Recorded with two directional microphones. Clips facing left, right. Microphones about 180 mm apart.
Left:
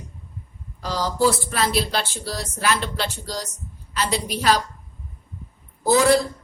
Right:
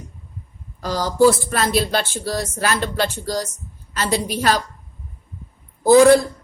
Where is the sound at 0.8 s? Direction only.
45° right (ahead or behind).